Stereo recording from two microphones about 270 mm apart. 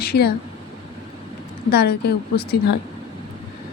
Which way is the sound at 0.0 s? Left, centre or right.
Left.